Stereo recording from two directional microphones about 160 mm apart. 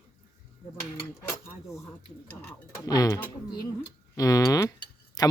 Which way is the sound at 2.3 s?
20° left (ahead or behind).